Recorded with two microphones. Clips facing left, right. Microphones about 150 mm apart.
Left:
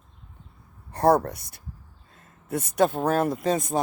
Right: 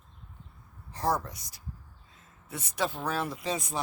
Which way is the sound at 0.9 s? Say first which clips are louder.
Left 10 dB; 60° left (ahead or behind).